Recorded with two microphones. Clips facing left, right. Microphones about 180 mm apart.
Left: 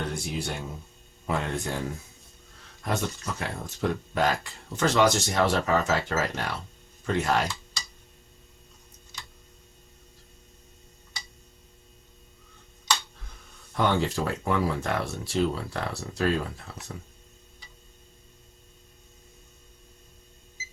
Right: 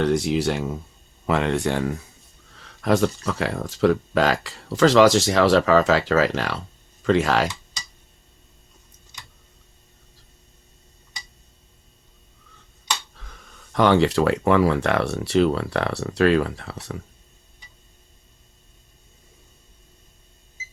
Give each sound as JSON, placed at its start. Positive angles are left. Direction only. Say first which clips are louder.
{"t": 0.0, "sound": "speech", "louder": "right 12 dB", "side_deg": -90}
{"t": 2.8, "sound": "speech", "louder": "right 10 dB", "side_deg": -90}
{"t": 13.2, "sound": "a sound", "louder": "right 4 dB", "side_deg": -90}
{"t": 13.7, "sound": "speech", "louder": "right 8 dB", "side_deg": -80}